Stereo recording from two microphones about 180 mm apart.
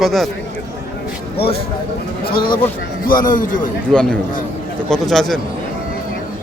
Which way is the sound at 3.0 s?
50° left (ahead or behind).